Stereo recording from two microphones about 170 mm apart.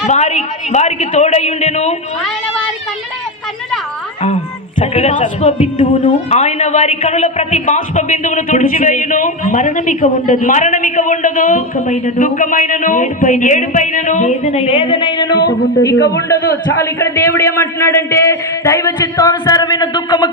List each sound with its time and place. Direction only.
0.1 s a woman's voice: 45° left (ahead or behind)
4.8 s a woman's voice: 40° left (ahead or behind); by 20.3 s 25° left (ahead or behind)